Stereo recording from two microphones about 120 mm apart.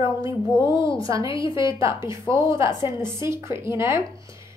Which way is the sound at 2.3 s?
45° left (ahead or behind).